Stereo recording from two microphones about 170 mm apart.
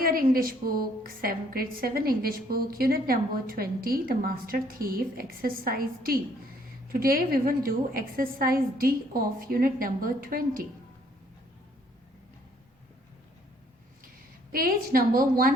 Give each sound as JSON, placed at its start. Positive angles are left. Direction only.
{"t": 0.0, "sound": "a woman's voice", "side_deg": -60}
{"t": 14.5, "sound": "a woman's voice", "side_deg": -55}